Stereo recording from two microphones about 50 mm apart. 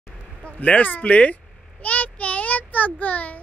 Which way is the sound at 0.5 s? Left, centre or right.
Left.